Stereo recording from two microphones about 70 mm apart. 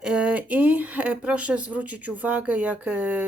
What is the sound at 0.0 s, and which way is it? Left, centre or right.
Speech, centre.